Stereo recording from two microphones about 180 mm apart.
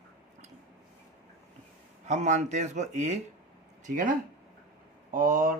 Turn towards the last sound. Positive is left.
turn(degrees=-50)  # may be behind; listen again after turning